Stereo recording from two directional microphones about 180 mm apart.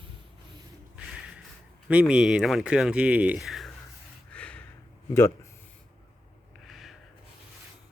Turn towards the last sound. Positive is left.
turn(degrees=0)  # may be behind; listen again after turning